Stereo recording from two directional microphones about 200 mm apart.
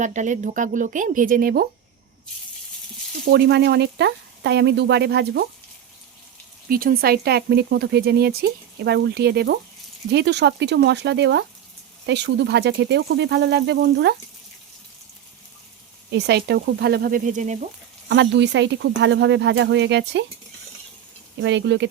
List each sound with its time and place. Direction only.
0.0 s speech: 35° right (ahead or behind)
3.2 s speech: 55° right (ahead or behind)
6.7 s speech: 45° right (ahead or behind)
16.1 s speech: 55° right (ahead or behind); by 17.7 s 35° right (ahead or behind)
18.1 s speech: 65° right (ahead or behind)
21.4 s speech: 60° right (ahead or behind)